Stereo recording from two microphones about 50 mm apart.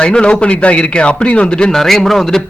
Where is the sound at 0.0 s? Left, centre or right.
Left.